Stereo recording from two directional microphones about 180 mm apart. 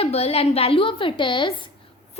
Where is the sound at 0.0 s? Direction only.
35° left (ahead or behind).